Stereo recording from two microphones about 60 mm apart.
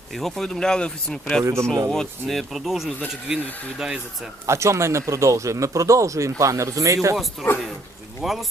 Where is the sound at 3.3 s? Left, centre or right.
Centre.